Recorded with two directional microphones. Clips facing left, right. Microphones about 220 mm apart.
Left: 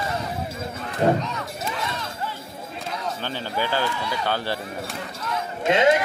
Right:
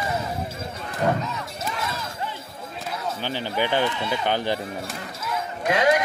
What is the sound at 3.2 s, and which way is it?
Speech, 15° right (ahead or behind).